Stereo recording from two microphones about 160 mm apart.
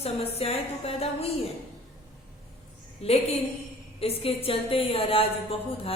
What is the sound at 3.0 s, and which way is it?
A woman's voice, 40° left (ahead or behind).